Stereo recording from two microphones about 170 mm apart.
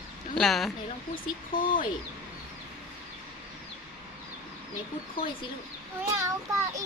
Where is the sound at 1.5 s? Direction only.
55° left (ahead or behind).